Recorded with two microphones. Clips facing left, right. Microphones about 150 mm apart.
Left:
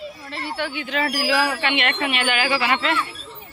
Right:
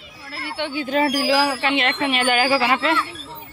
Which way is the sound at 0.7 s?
45° right (ahead or behind).